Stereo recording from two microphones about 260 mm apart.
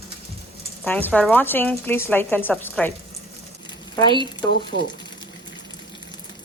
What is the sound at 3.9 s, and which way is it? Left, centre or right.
Speech, centre.